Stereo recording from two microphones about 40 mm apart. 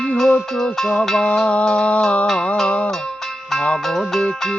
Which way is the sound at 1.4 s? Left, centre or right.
Left.